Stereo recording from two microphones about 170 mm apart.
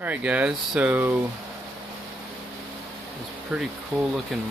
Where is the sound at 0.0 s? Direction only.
10° right (ahead or behind).